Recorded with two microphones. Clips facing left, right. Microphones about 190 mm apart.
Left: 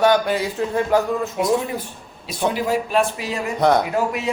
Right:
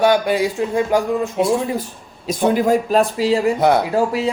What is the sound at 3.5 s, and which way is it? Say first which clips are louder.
Speech: right 2 dB; 5° right (ahead or behind).